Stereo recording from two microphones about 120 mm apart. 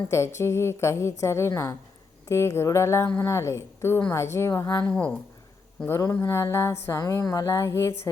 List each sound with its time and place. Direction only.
0.1 s speech: 25° left (ahead or behind)
4.8 s a woman's voice: 10° left (ahead or behind)
5.9 s speech: 25° left (ahead or behind)